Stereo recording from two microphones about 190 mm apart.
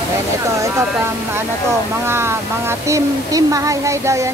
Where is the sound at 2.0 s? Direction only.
15° right (ahead or behind).